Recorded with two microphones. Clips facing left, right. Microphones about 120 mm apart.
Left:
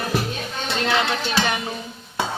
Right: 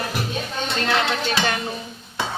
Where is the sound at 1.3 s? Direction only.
15° left (ahead or behind).